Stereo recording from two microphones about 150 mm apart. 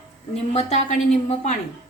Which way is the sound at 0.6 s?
50° left (ahead or behind).